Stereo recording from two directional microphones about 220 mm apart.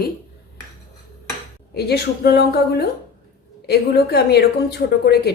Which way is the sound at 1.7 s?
45° left (ahead or behind).